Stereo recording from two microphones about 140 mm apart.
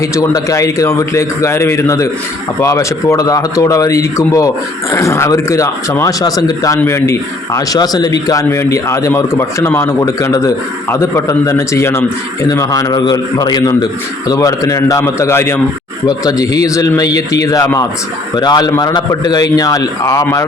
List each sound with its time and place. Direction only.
0.0 s a man's voice: 25° left (ahead or behind)